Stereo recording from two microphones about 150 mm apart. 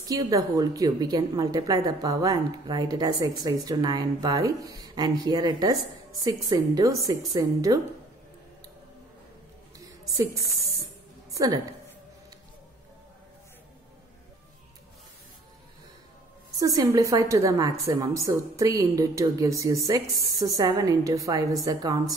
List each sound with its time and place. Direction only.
0.0 s a woman's voice: 25° right (ahead or behind)
9.8 s a sound: 20° right (ahead or behind)
11.3 s a woman's voice: 25° right (ahead or behind)
16.5 s a woman's voice: 25° right (ahead or behind)